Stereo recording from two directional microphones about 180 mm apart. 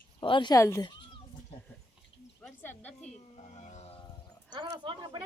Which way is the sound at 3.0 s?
40° left (ahead or behind).